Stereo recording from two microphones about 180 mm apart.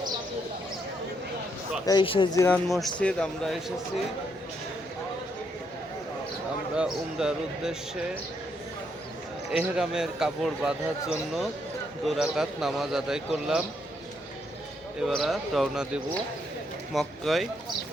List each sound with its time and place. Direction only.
1.9 s speech: 25° left (ahead or behind)
2.6 s speech: centre (ahead or behind)
6.7 s speech: 5° right (ahead or behind)
9.5 s speech: 5° right (ahead or behind)
15.0 s speech: centre (ahead or behind)